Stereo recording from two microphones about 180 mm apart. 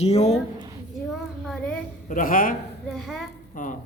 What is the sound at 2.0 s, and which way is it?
Speech, 50° left (ahead or behind).